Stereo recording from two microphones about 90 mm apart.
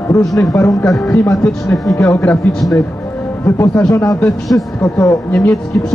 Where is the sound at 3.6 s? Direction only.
30° left (ahead or behind).